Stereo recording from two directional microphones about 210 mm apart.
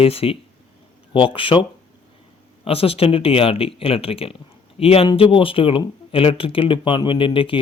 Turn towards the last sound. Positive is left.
turn(degrees=25)  # may be behind; listen again after turning